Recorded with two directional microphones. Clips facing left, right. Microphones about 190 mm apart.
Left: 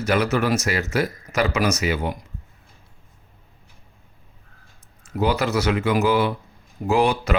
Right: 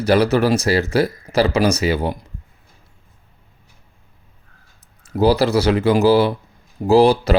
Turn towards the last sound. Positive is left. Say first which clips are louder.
# right 7 dB
turn(degrees=-35)  # may be behind; listen again after turning